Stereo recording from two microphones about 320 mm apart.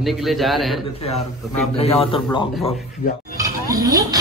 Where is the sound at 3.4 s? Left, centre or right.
Centre.